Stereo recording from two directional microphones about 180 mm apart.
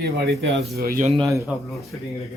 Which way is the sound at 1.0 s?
35° right (ahead or behind).